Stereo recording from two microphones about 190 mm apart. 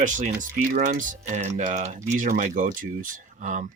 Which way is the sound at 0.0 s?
40° right (ahead or behind).